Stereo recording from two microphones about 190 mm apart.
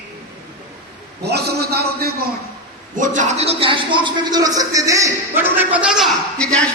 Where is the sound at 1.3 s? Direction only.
60° right (ahead or behind).